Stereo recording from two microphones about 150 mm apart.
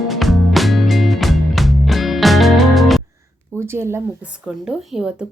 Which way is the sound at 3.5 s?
15° right (ahead or behind).